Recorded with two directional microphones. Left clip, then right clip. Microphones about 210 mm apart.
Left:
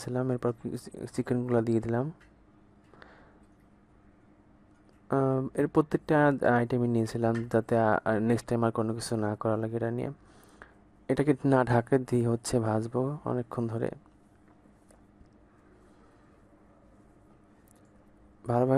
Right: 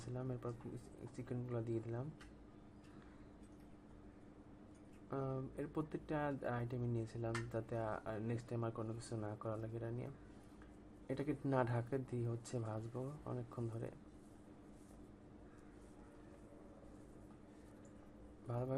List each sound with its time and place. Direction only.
0.0 s speech: 50° left (ahead or behind)
5.0 s speech: 50° left (ahead or behind)
18.4 s speech: 55° left (ahead or behind)